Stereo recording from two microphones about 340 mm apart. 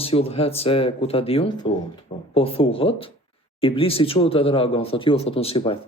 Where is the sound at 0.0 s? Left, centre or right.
Centre.